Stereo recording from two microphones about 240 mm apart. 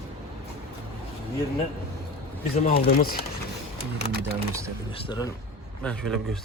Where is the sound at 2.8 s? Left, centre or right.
Left.